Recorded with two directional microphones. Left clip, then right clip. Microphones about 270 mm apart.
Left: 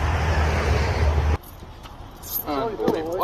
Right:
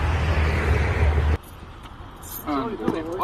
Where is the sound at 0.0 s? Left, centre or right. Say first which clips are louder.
Left 2 dB; centre.